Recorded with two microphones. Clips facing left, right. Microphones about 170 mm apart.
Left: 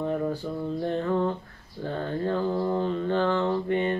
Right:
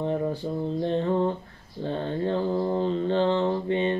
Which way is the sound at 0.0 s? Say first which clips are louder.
Right 1 dB; 20° right (ahead or behind).